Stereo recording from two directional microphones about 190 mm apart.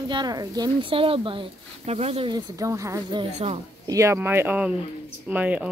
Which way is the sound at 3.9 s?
15° right (ahead or behind).